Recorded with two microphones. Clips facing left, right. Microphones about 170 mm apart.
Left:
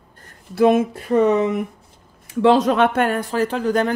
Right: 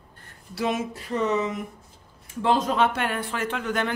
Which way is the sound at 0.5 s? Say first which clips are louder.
Left 11 dB; 55° left (ahead or behind).